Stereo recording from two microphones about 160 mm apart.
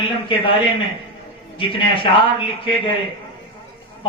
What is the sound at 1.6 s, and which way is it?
Speech, 30° left (ahead or behind).